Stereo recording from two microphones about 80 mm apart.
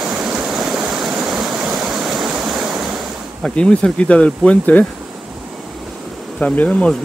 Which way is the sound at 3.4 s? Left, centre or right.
Centre.